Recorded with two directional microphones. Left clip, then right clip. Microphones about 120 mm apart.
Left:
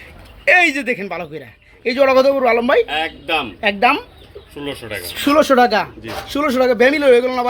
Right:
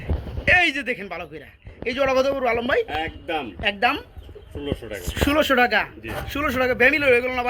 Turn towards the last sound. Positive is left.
turn(degrees=30)  # may be behind; listen again after turning